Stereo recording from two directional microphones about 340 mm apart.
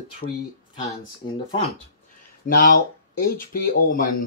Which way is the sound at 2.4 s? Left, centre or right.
Left.